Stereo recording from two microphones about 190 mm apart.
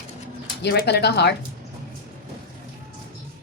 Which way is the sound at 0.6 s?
60° left (ahead or behind).